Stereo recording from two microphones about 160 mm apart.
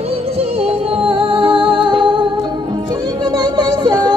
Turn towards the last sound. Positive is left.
turn(degrees=-25)  # may be behind; listen again after turning